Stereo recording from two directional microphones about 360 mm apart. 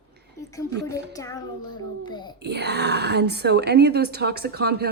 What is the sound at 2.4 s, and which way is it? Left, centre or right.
Speech, right.